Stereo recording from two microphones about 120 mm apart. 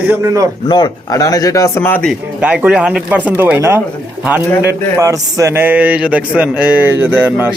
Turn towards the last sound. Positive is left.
turn(degrees=-15)  # may be behind; listen again after turning